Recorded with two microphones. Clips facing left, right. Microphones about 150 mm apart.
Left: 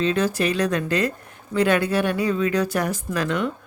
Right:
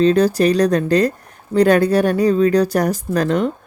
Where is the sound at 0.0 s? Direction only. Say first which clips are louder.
Right 8 dB; 40° right (ahead or behind).